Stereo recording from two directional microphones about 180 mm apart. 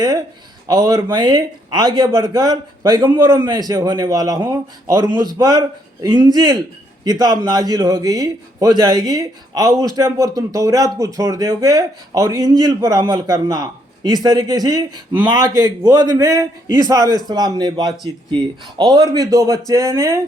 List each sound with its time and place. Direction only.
0.7 s a man's voice: 20° right (ahead or behind)